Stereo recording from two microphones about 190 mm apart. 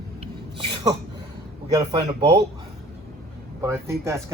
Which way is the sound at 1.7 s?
20° right (ahead or behind).